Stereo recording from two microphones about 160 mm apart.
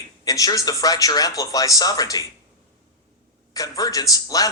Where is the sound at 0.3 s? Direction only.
20° left (ahead or behind).